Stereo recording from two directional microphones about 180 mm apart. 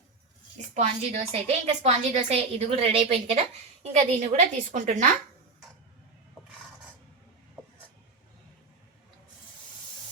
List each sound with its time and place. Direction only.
0.7 s a woman's voice: 40° right (ahead or behind)